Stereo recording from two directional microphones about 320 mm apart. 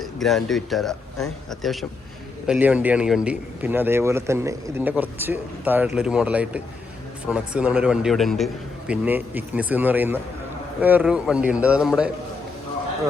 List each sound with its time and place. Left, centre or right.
0.0 s a man's voice: centre